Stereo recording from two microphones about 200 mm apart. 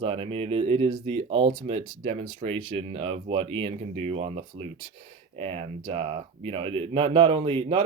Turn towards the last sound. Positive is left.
turn(degrees=-25)  # may be behind; listen again after turning